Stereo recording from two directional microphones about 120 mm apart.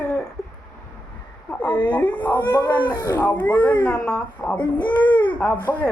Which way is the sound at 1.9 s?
15° left (ahead or behind).